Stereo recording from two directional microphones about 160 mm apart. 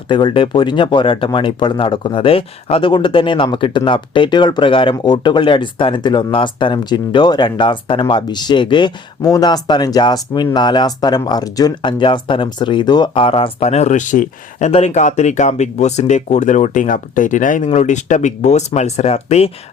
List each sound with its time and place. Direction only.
0.1 s speech: 30° left (ahead or behind)